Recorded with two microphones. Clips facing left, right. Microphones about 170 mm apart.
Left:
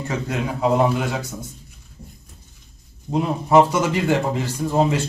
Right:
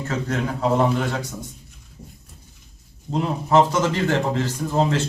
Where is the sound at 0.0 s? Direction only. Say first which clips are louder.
Even; 15° left (ahead or behind).